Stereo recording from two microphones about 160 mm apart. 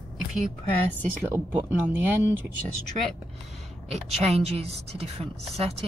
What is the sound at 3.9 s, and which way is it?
Speech, 40° right (ahead or behind).